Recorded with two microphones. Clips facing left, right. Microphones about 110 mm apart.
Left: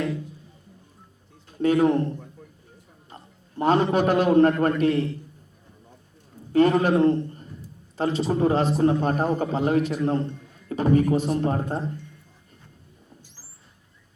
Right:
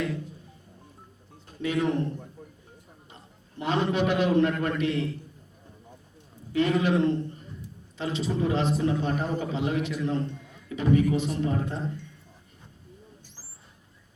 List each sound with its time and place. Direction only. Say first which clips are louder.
1.6 s a man's voice: left 7 dB; 45° left (ahead or behind)
3.6 s a man's voice: left 5 dB; 45° left (ahead or behind)
6.5 s a man's voice: left 5 dB; 45° left (ahead or behind)